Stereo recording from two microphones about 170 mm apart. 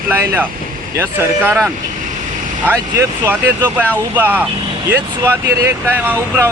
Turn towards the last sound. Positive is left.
turn(degrees=-10)  # may be behind; listen again after turning